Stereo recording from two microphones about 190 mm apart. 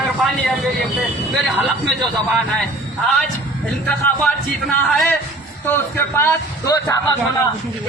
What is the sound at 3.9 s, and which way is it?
A man's voice, 5° left (ahead or behind).